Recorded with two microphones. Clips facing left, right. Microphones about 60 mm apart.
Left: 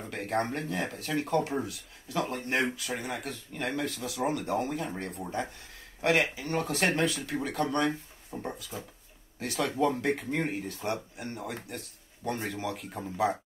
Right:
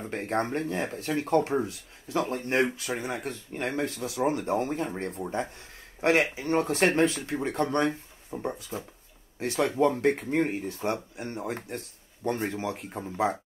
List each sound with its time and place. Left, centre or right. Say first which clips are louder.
0.1 s speech: right 2 dB; right
5.2 s speech: right 3 dB; right
8.3 s speech: right 4 dB; centre
8.5 s speech: right 4 dB; right